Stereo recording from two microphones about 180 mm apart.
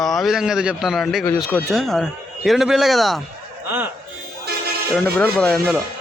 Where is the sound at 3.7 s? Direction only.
10° right (ahead or behind).